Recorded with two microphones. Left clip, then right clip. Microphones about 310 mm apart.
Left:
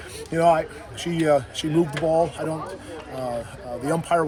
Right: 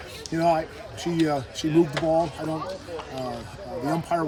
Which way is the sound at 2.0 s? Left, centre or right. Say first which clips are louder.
Left 1 dB; right.